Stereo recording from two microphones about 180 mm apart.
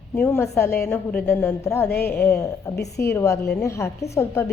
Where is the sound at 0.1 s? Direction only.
10° left (ahead or behind).